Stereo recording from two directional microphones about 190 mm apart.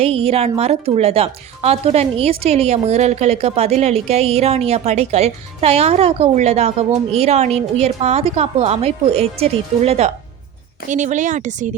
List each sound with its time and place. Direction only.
0.0 s a woman's voice: 30° right (ahead or behind)